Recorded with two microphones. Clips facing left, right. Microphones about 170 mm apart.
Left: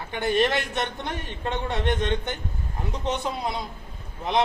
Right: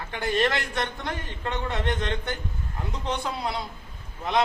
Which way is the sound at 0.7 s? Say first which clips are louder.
Left 1 dB; 20° left (ahead or behind).